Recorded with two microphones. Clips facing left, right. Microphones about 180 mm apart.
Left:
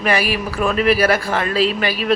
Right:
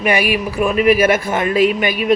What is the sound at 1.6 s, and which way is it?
Speech, 35° left (ahead or behind).